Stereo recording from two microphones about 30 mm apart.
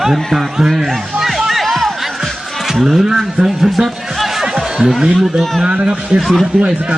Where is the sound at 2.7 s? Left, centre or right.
Centre.